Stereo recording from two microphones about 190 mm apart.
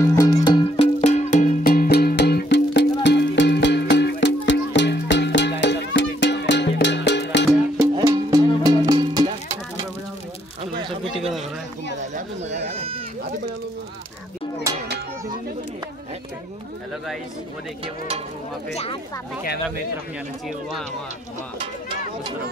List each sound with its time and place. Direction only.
0.0 s music: 15° left (ahead or behind); by 7.4 s 65° left (ahead or behind)
7.9 s music: 15° right (ahead or behind)
12.4 s goat: 35° right (ahead or behind)